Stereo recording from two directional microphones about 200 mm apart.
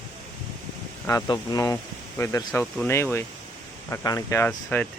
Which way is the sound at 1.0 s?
20° left (ahead or behind).